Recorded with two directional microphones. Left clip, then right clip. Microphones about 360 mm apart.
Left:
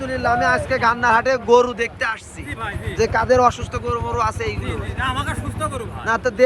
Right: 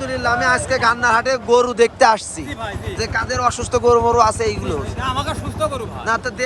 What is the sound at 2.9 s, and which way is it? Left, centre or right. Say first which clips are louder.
Speech: left 6 dB; centre.